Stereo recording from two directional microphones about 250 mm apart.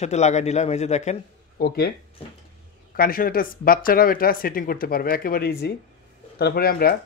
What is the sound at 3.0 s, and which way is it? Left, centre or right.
A man's voice, left.